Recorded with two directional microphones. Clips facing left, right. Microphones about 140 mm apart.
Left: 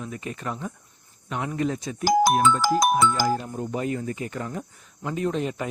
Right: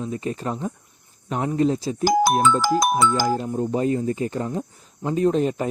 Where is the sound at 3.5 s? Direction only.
20° right (ahead or behind).